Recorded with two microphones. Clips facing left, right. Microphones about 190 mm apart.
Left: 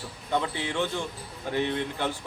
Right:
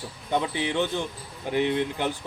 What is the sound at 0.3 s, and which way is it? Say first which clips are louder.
Speech: right 2 dB; 15° right (ahead or behind).